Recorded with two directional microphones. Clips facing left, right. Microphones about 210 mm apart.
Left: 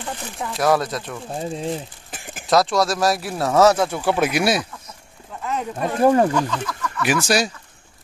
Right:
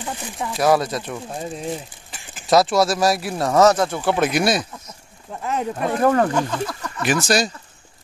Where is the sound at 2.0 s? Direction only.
50° left (ahead or behind).